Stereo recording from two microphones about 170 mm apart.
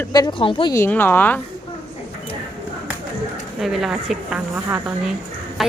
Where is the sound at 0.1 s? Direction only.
25° left (ahead or behind).